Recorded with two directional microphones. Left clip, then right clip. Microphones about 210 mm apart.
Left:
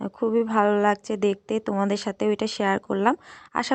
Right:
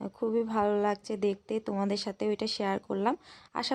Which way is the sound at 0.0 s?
20° left (ahead or behind).